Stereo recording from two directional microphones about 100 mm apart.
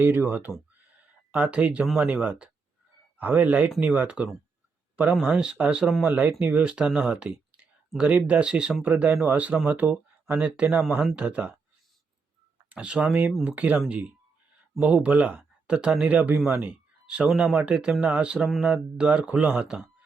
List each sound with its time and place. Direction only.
0.0 s speech: 20° right (ahead or behind)
3.2 s speech: 15° right (ahead or behind)
6.1 s speech: 15° right (ahead or behind)
10.3 s speech: 10° right (ahead or behind)
12.6 s speech: 15° right (ahead or behind)